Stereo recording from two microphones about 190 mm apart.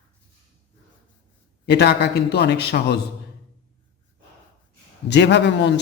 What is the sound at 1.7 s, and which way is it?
Speech, 60° left (ahead or behind).